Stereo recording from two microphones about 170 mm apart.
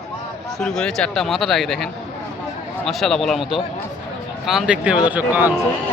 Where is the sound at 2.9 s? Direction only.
Centre (ahead or behind).